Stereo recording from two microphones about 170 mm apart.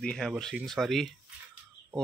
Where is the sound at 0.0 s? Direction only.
5° left (ahead or behind).